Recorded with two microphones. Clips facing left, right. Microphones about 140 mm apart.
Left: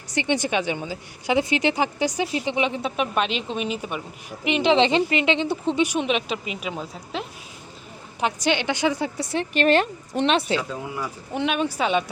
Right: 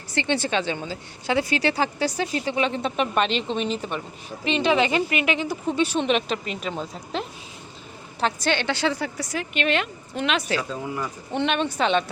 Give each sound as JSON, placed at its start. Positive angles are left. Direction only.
{"t": 0.1, "sound": "a woman's voice", "side_deg": 15}
{"t": 6.1, "sound": "a woman's voice", "side_deg": 5}
{"t": 8.2, "sound": "a woman's voice", "side_deg": 15}
{"t": 10.6, "sound": "a woman's voice", "side_deg": 10}